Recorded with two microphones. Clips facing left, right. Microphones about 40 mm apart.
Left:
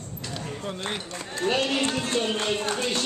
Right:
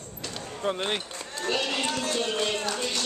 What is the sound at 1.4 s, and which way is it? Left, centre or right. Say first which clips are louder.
Speech: left 3 dB; left.